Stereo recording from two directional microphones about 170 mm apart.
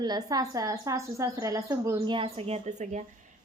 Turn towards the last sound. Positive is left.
turn(degrees=-40)  # may be behind; listen again after turning